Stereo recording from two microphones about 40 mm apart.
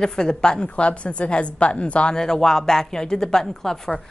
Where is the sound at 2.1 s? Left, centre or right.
Centre.